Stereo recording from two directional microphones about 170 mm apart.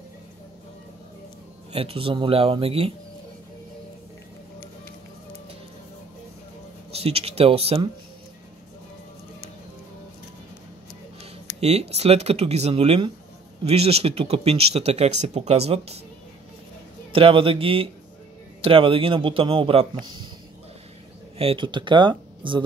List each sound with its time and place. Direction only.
1.7 s speech: 35° right (ahead or behind)
6.9 s speech: 35° right (ahead or behind)
11.6 s speech: 40° right (ahead or behind)
17.1 s speech: 30° right (ahead or behind)
21.4 s speech: 30° right (ahead or behind)